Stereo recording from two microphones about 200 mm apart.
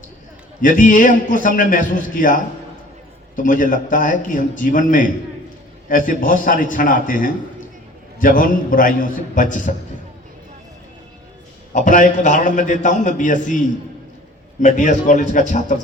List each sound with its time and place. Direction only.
0.6 s a man's voice: 40° left (ahead or behind)
11.7 s a man's voice: 40° left (ahead or behind)
14.6 s a man's voice: 40° left (ahead or behind)